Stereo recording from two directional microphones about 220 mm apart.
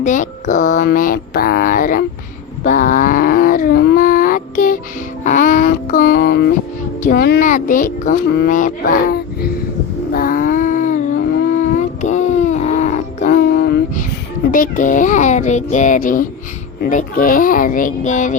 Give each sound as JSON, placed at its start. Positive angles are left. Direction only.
{"t": 0.0, "sound": "speech", "side_deg": 35}
{"t": 2.6, "sound": "wild animals", "side_deg": 35}
{"t": 5.2, "sound": "a sound", "side_deg": 35}
{"t": 7.0, "sound": "speech", "side_deg": 40}
{"t": 10.1, "sound": "a sound", "side_deg": 40}
{"t": 14.5, "sound": "speech", "side_deg": 35}